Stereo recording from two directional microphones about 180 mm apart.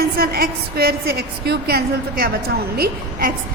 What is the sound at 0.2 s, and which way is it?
A woman's voice, 55° right (ahead or behind).